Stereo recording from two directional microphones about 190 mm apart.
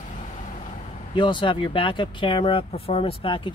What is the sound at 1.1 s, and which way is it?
Speech, 25° left (ahead or behind).